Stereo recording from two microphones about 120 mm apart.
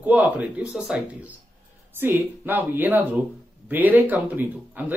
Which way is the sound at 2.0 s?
15° right (ahead or behind).